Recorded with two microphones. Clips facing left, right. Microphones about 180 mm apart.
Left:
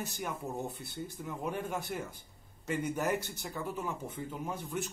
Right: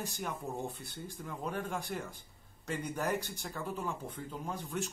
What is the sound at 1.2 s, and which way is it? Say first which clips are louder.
A man's voice: left 1 dB; 10° left (ahead or behind).